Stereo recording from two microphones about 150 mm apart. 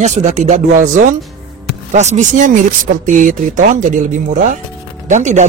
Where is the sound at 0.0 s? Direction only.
50° right (ahead or behind).